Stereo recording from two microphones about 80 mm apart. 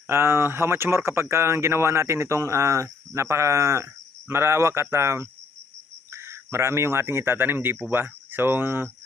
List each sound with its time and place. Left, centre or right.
0.1 s speech: right